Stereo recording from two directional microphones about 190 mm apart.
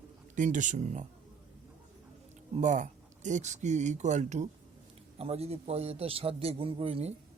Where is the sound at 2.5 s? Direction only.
40° right (ahead or behind).